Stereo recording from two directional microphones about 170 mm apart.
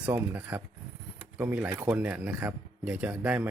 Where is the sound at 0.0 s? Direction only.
10° right (ahead or behind).